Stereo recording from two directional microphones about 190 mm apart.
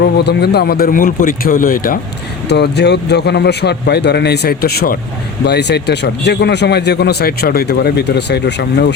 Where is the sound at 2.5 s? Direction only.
60° left (ahead or behind).